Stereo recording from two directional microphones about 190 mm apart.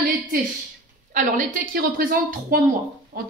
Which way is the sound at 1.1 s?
45° right (ahead or behind).